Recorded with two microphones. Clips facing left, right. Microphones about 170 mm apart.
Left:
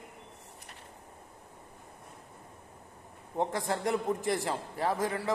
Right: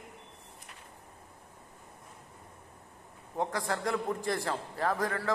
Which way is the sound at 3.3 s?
20° left (ahead or behind).